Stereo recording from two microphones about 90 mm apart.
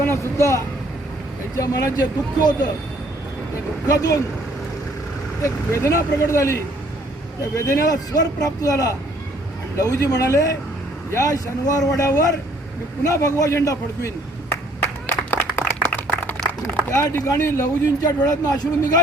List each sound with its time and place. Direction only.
0.0 s speech: 30° left (ahead or behind)
3.8 s speech: 40° left (ahead or behind)
5.4 s speech: 35° left (ahead or behind)
14.8 s a sound: 25° left (ahead or behind)
16.6 s speech: 30° left (ahead or behind); by 18.7 s 45° left (ahead or behind)